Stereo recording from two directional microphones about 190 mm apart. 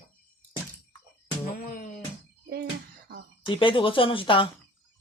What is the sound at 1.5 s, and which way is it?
Music, 50° left (ahead or behind).